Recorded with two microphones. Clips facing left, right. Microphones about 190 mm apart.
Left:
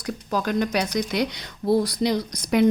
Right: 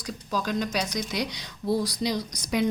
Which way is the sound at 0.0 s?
60° left (ahead or behind).